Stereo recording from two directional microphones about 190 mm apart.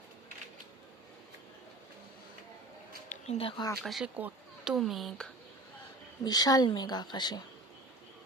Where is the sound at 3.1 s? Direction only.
35° left (ahead or behind).